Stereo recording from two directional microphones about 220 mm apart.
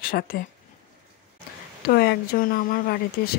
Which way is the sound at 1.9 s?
45° left (ahead or behind).